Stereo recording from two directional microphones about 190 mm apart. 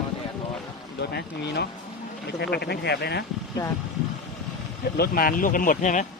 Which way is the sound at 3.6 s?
20° left (ahead or behind).